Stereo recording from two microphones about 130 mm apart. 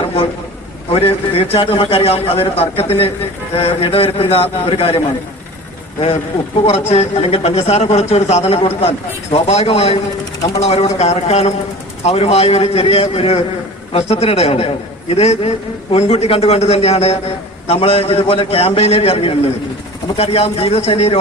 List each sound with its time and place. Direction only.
0.9 s a man's voice: 50° left (ahead or behind)
6.7 s a man's voice: 55° left (ahead or behind)